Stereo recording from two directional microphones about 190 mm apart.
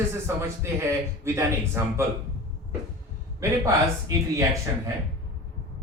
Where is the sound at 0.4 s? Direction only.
15° right (ahead or behind).